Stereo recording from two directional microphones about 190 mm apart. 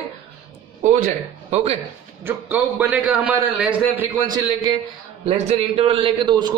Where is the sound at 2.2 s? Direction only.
10° right (ahead or behind).